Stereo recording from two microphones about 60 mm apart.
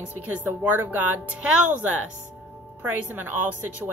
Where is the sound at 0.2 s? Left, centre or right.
Right.